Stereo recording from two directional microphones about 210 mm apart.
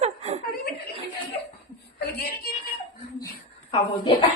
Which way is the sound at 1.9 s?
50° left (ahead or behind).